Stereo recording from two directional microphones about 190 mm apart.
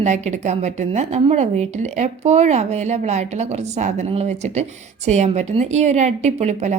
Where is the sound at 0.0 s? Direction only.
35° right (ahead or behind).